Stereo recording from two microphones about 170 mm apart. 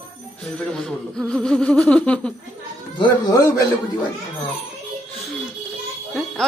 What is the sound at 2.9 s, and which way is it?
Speech, 25° left (ahead or behind).